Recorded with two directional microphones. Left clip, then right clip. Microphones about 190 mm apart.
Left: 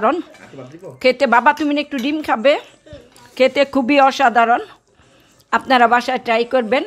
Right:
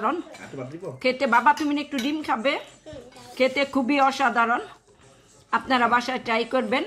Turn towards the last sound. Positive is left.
turn(degrees=45)  # may be behind; listen again after turning